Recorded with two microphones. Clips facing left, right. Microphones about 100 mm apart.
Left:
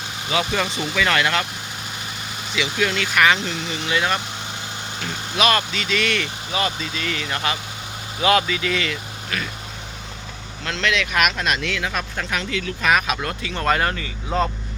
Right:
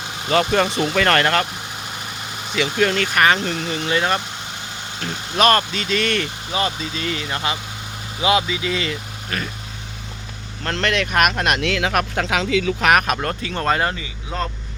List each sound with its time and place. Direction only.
0.3 s speech: 45° right (ahead or behind)
2.6 s speech: 45° right (ahead or behind)
3.8 s speech: 35° right (ahead or behind)
5.4 s speech: 40° right (ahead or behind)
6.5 s speech: 30° right (ahead or behind)
10.6 s speech: 50° right (ahead or behind)
13.2 s speech: 40° right (ahead or behind); by 14.1 s 20° right (ahead or behind)
14.3 s speech: centre (ahead or behind)